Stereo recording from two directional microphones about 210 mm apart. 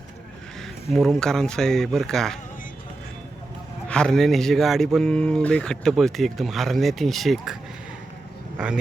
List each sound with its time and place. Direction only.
0.9 s speech: centre (ahead or behind)
3.8 s speech: 5° left (ahead or behind)
8.5 s speech: 5° right (ahead or behind)